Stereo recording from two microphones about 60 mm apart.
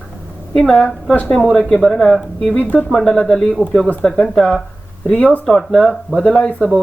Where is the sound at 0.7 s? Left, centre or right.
Left.